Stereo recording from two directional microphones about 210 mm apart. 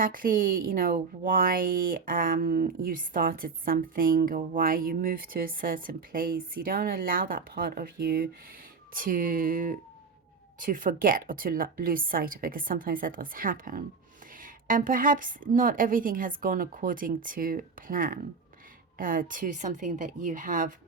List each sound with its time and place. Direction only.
0.0 s a woman's voice: 40° right (ahead or behind)